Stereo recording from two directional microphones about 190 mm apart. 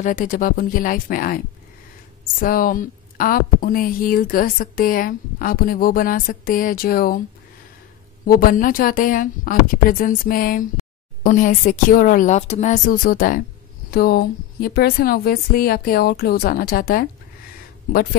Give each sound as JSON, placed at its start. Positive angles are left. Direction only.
{"t": 0.0, "sound": "a woman's voice", "side_deg": 45}
{"t": 2.4, "sound": "a woman's voice", "side_deg": 50}
{"t": 8.3, "sound": "a woman's voice", "side_deg": 45}